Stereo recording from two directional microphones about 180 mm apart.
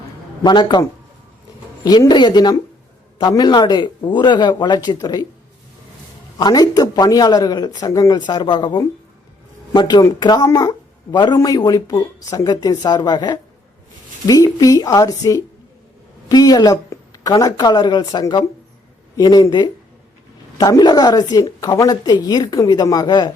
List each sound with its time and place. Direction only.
0.4 s speech: 25° left (ahead or behind)
6.4 s speech: 20° left (ahead or behind)